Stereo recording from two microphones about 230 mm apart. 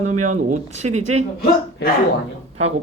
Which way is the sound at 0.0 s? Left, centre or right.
Right.